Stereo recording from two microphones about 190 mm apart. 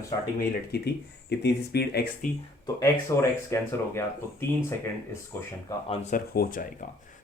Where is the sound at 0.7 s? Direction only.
55° left (ahead or behind).